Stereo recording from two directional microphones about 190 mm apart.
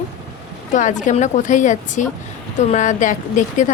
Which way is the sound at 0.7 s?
40° left (ahead or behind).